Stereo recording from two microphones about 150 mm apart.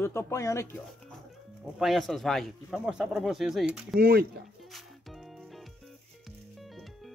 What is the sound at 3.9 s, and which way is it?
Speech, 90° right.